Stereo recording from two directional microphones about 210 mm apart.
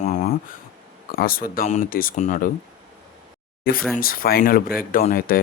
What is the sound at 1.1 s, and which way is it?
Speech, 45° left (ahead or behind).